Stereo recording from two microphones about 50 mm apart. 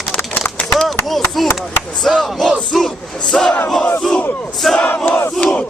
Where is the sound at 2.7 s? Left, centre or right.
Centre.